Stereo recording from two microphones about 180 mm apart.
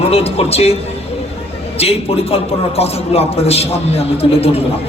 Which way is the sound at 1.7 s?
35° left (ahead or behind).